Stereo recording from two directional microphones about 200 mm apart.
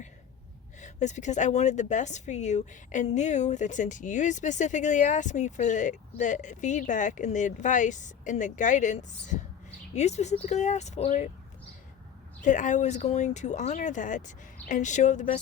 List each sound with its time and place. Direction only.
0.8 s a woman's voice: 35° left (ahead or behind)
12.4 s a woman's voice: 40° left (ahead or behind)